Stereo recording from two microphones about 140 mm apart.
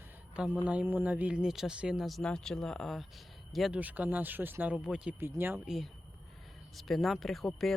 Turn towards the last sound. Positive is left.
turn(degrees=0)  # may be behind; listen again after turning